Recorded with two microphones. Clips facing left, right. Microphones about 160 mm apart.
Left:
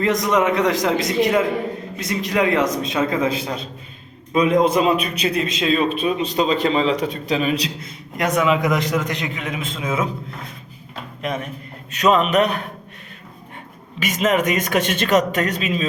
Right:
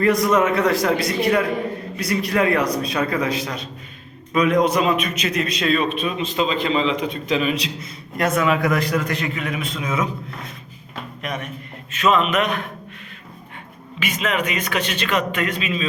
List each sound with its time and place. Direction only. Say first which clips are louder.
0.0 s a man's voice: right 1 dB; 20° left (ahead or behind); by 7.5 s 35° left (ahead or behind)
8.2 s a man's voice: left 1 dB; 15° left (ahead or behind)
11.9 s a man's voice: left 2 dB; 40° left (ahead or behind)
14.3 s a man's voice: left 5 dB; 45° left (ahead or behind)